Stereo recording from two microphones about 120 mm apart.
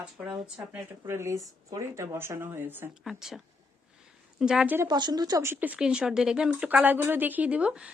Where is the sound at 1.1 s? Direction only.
20° right (ahead or behind).